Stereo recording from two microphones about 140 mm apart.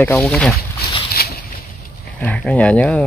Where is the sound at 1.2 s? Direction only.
90° left.